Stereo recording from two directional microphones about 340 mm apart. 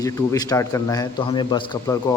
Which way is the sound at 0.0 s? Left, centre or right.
Centre.